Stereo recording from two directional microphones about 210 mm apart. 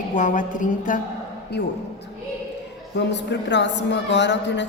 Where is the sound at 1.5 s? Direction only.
50° left (ahead or behind).